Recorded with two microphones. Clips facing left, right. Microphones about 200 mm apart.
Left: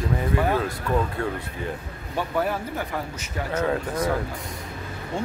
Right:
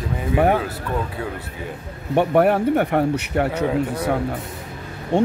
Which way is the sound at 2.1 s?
65° right (ahead or behind).